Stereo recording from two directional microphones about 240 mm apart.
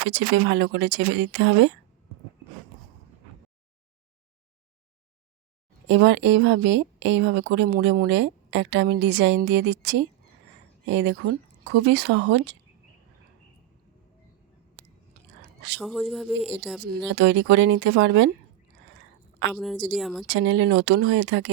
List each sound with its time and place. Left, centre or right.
0.1 s speech: right
5.9 s speech: right
15.8 s speech: centre
17.1 s speech: right
19.5 s speech: centre
20.2 s speech: right